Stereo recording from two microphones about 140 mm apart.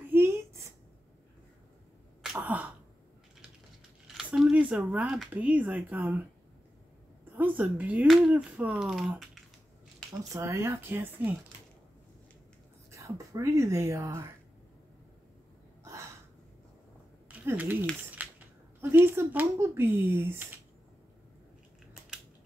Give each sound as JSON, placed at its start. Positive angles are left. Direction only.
{"t": 0.1, "sound": "a sound", "side_deg": -15}
{"t": 2.3, "sound": "sneeze", "side_deg": -15}
{"t": 4.1, "sound": "speech", "side_deg": -5}
{"t": 7.3, "sound": "speech", "side_deg": -10}
{"t": 10.3, "sound": "speech", "side_deg": -20}
{"t": 12.9, "sound": "speech", "side_deg": -20}
{"t": 15.8, "sound": "a sound", "side_deg": -20}
{"t": 17.3, "sound": "a sound", "side_deg": -10}
{"t": 18.8, "sound": "speech", "side_deg": -15}